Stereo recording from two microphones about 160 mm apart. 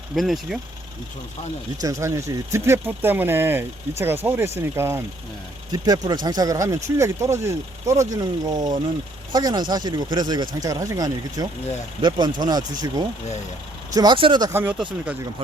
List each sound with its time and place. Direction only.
0.2 s speech: centre (ahead or behind)
1.8 s speech: 20° right (ahead or behind)
14.5 s speech: 10° right (ahead or behind)